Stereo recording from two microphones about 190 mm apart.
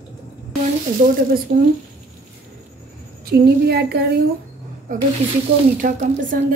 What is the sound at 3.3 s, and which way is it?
Speech, 60° right (ahead or behind).